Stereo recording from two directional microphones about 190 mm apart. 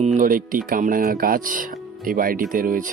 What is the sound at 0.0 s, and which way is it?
Speech, 40° right (ahead or behind).